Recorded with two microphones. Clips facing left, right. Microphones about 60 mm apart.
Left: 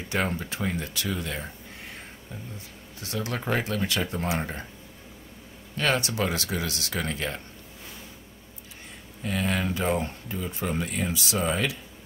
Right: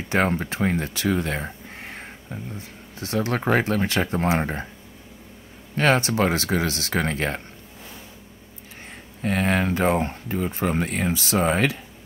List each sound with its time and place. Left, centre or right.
0.3 s speech: right
5.8 s speech: right
9.2 s speech: right